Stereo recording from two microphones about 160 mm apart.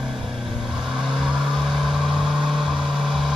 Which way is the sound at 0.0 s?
5° right (ahead or behind).